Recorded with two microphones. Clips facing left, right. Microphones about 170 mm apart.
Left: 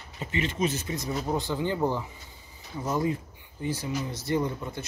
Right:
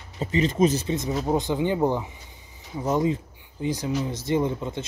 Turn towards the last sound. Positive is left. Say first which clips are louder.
# right 4 dB
turn(degrees=-20)  # may be behind; listen again after turning